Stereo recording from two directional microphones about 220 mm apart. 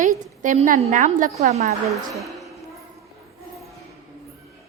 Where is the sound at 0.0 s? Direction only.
35° right (ahead or behind).